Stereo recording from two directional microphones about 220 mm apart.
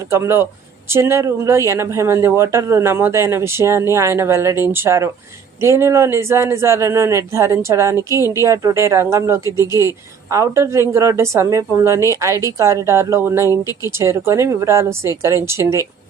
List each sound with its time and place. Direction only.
0.1 s speech: 10° right (ahead or behind)
13.5 s speech: 15° left (ahead or behind)
14.0 s speech: 10° right (ahead or behind)